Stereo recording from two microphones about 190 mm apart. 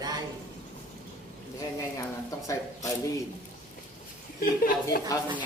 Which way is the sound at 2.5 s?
15° left (ahead or behind).